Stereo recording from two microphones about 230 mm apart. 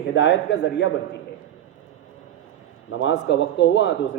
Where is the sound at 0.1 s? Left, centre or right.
Left.